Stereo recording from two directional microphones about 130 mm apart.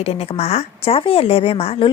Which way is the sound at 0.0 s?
50° left (ahead or behind).